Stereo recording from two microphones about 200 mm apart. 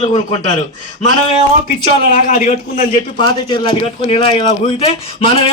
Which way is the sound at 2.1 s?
40° left (ahead or behind).